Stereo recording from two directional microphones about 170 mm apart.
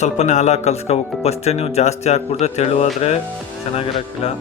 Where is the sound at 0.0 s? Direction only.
45° left (ahead or behind).